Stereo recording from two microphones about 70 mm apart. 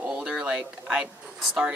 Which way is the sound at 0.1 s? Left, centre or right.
Centre.